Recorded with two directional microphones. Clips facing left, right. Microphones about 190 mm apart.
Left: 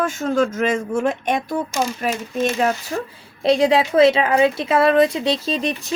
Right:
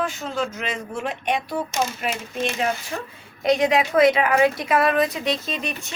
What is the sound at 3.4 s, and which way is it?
A woman's voice, 30° left (ahead or behind).